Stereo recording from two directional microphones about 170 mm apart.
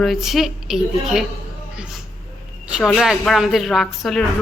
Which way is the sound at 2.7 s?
Centre (ahead or behind).